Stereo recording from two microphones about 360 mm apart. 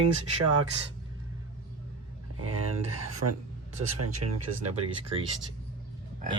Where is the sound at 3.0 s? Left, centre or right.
Right.